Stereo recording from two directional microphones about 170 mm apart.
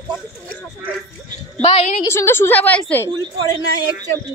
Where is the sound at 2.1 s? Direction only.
15° left (ahead or behind).